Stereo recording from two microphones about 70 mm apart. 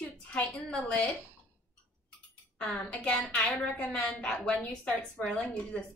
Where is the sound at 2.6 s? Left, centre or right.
Centre.